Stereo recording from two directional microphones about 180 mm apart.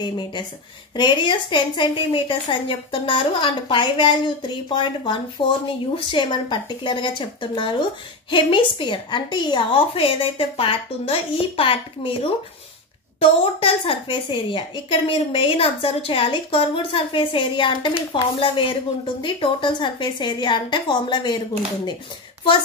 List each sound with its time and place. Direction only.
0.9 s a woman's voice: 25° left (ahead or behind)